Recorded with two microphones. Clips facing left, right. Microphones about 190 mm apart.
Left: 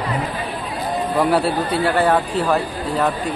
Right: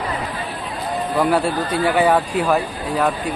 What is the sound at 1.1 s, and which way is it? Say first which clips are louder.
Speech: even; centre (ahead or behind).